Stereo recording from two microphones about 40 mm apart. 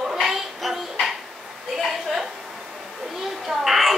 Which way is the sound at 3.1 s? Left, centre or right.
Centre.